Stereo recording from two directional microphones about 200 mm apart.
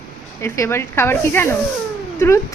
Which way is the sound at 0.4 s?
15° left (ahead or behind).